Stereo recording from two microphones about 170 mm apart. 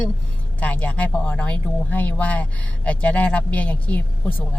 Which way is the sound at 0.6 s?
10° left (ahead or behind).